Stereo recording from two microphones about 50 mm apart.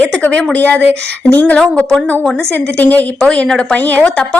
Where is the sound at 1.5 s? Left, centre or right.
Centre.